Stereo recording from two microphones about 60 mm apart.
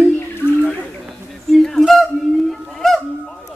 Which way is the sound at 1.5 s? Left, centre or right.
Centre.